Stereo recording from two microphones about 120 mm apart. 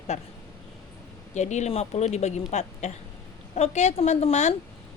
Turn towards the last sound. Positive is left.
turn(degrees=70)  # may be behind; listen again after turning